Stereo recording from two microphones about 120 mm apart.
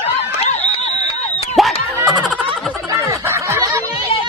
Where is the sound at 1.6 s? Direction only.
Centre (ahead or behind).